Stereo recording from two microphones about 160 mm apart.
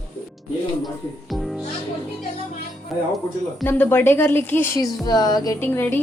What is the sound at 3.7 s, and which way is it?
Speech, 15° left (ahead or behind).